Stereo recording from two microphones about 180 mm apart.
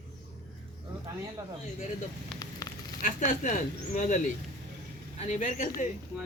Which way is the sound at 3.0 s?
45° left (ahead or behind).